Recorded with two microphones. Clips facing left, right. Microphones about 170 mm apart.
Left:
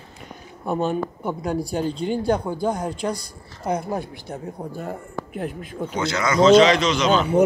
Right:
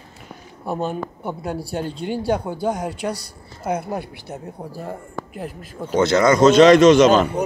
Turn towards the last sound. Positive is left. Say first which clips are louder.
# right 8 dB
turn(degrees=-45)  # may be behind; listen again after turning